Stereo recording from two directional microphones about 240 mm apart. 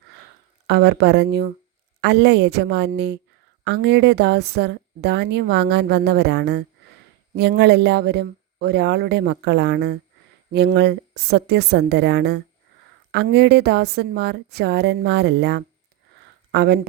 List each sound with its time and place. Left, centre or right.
0.7 s speech: right